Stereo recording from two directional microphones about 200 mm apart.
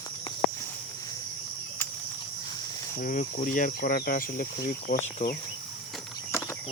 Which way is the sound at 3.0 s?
40° left (ahead or behind).